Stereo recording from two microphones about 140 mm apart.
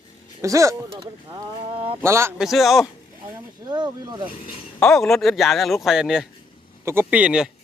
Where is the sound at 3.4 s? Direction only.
30° right (ahead or behind).